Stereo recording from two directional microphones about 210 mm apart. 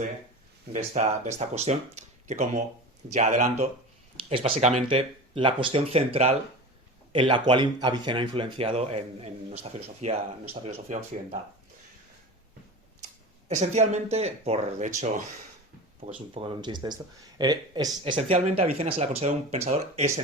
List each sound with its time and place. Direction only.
0.7 s speech: 35° right (ahead or behind)
13.5 s speech: 35° right (ahead or behind)